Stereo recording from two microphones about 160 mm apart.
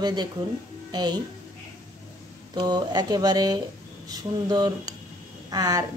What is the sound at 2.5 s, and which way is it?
A woman's voice, 25° right (ahead or behind).